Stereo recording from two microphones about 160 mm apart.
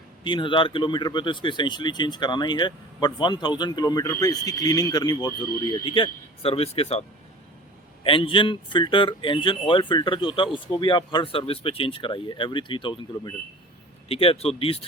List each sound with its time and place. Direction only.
0.3 s speech: 30° left (ahead or behind)
8.0 s a man's voice: 35° left (ahead or behind)